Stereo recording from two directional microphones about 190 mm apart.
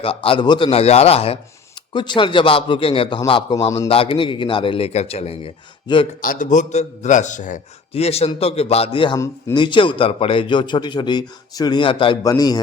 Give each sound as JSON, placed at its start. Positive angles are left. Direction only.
{"t": 0.0, "sound": "a man's voice", "side_deg": 30}
{"t": 6.2, "sound": "a man's voice", "side_deg": 45}